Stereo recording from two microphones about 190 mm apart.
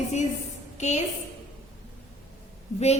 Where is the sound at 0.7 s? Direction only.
35° left (ahead or behind).